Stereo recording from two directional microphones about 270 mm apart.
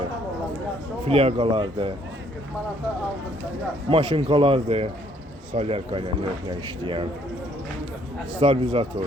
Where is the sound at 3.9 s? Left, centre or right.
Centre.